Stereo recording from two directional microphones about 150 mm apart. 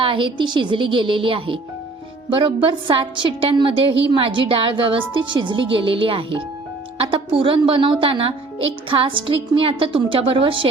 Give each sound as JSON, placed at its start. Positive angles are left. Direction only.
{"t": 0.0, "sound": "a woman's voice", "side_deg": -35}